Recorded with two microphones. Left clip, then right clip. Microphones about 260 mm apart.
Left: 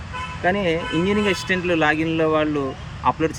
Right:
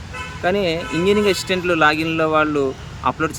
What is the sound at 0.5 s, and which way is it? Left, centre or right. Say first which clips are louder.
Speech: right 1 dB; centre.